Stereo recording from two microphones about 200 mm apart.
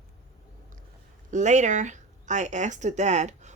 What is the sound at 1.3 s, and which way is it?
Speech, 35° right (ahead or behind).